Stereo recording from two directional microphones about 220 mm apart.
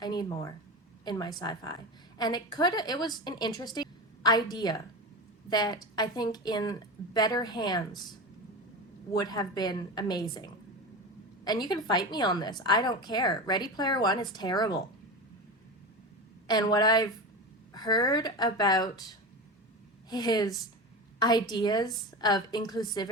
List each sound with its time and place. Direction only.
0.0 s a woman's voice: 20° left (ahead or behind)
9.1 s a woman's voice: 20° left (ahead or behind)
16.5 s speech: 20° left (ahead or behind)
20.1 s a woman's voice: 20° left (ahead or behind)